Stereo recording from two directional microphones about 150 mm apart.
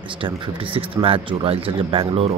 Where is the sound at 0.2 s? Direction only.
35° right (ahead or behind).